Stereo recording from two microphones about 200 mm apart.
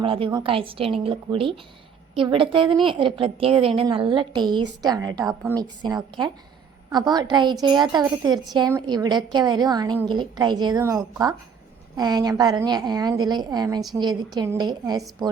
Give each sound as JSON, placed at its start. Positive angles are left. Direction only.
{"t": 0.0, "sound": "speech", "side_deg": -25}